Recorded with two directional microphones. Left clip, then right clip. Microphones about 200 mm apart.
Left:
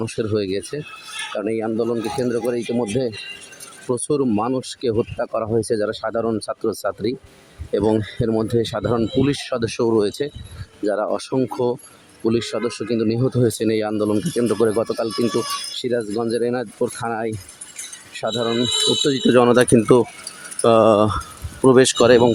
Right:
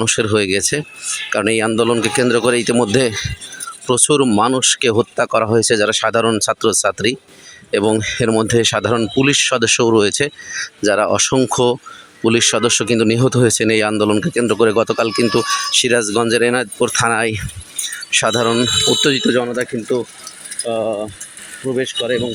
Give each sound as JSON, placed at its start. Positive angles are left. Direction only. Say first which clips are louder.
{"t": 0.0, "sound": "speech", "louder": "right 7 dB", "side_deg": -5}
{"t": 3.8, "sound": "speech", "louder": "right 6 dB", "side_deg": -5}
{"t": 19.1, "sound": "speech", "louder": "right 1 dB", "side_deg": 5}
{"t": 19.4, "sound": "speech", "louder": "left 6 dB", "side_deg": 25}
{"t": 20.7, "sound": "speech", "louder": "left 6 dB", "side_deg": 35}